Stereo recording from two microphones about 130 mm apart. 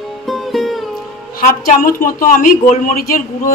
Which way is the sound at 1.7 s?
90° left.